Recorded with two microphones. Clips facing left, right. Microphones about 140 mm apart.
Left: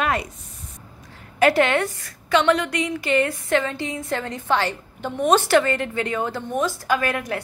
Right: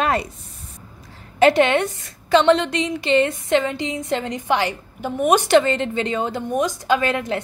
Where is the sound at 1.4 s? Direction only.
20° right (ahead or behind).